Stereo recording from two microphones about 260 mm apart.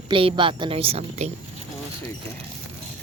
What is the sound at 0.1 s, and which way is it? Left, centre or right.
A woman's voice, centre.